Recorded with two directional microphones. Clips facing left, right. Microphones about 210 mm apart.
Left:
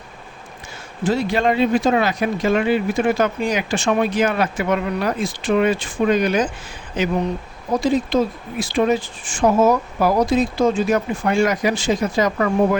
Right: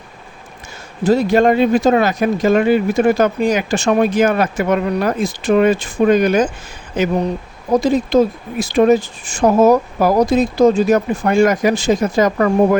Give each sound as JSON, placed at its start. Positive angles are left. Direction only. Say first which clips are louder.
{"t": 1.0, "sound": "speech", "louder": "right 6 dB", "side_deg": -45}